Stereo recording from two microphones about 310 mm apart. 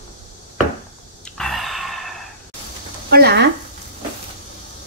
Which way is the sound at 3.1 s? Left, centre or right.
Right.